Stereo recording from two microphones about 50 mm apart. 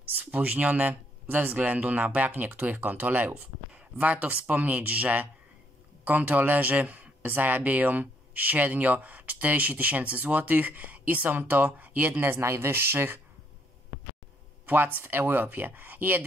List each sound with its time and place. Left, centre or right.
0.2 s speech: right
3.3 s speech: right
12.4 s speech: right
14.7 s speech: right